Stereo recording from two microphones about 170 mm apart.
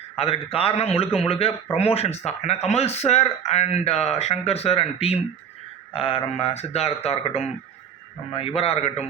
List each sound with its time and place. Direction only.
0.2 s speech: 35° left (ahead or behind)